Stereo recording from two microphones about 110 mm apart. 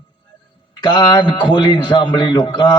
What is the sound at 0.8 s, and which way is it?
A man's voice, 40° left (ahead or behind).